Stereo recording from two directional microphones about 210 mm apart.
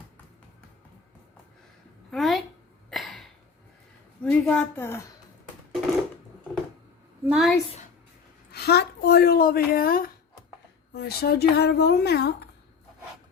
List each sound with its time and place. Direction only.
2.0 s a sound: centre (ahead or behind)
4.2 s a woman's voice: 5° left (ahead or behind)
7.3 s a woman's voice: centre (ahead or behind)
8.5 s speech: 50° left (ahead or behind)